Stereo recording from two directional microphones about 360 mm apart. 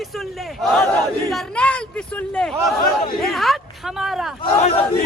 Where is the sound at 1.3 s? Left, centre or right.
Centre.